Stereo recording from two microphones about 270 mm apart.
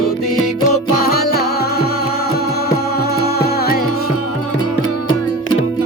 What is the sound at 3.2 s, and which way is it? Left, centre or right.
Music, left.